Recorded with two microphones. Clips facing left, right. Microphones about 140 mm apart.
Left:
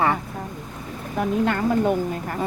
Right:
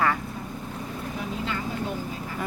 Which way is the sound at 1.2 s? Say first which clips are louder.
Left 11 dB; 60° left (ahead or behind).